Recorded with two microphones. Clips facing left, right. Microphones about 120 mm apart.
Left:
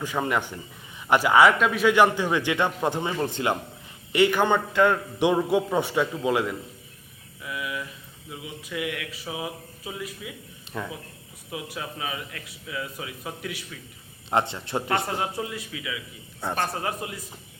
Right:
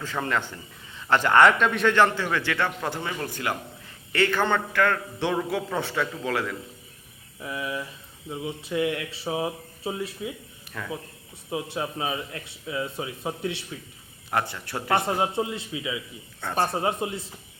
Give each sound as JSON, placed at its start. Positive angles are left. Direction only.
{"t": 0.0, "sound": "a man's voice", "side_deg": 15}
{"t": 7.4, "sound": "a man's voice", "side_deg": -30}
{"t": 10.7, "sound": "speech", "side_deg": 20}
{"t": 11.5, "sound": "a man's voice", "side_deg": -30}
{"t": 14.3, "sound": "speech", "side_deg": 20}
{"t": 14.8, "sound": "a man's voice", "side_deg": -25}